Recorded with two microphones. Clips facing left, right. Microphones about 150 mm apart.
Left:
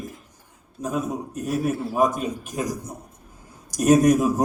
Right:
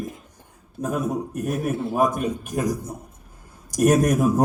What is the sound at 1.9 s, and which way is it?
Speech, 55° right (ahead or behind).